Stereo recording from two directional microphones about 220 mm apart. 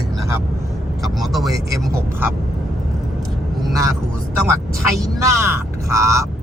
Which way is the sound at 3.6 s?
15° right (ahead or behind).